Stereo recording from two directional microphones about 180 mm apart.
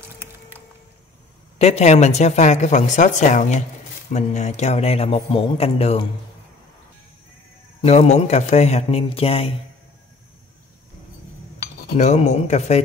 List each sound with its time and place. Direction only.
1.6 s speech: 40° left (ahead or behind)
7.8 s speech: 35° left (ahead or behind)
12.0 s speech: 40° left (ahead or behind)